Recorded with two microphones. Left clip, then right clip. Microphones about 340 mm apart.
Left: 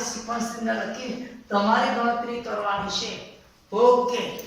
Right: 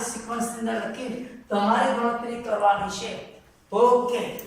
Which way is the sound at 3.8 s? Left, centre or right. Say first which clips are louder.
Left 1 dB; centre.